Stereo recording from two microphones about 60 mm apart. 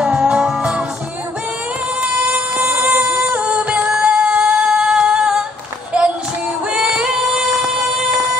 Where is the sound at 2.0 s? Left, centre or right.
Right.